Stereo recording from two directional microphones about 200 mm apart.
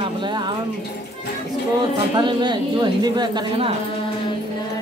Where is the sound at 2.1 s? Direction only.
20° right (ahead or behind).